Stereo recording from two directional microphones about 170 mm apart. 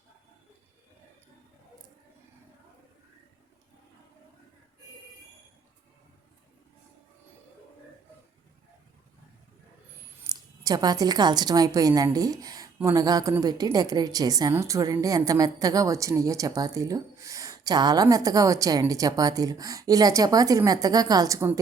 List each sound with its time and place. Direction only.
10.2 s a woman's voice: 20° right (ahead or behind)